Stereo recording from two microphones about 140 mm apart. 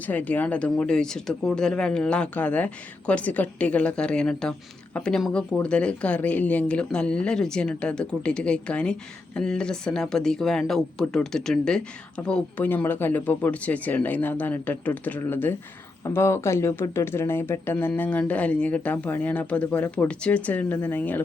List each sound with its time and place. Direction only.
0.0 s speech: 10° left (ahead or behind)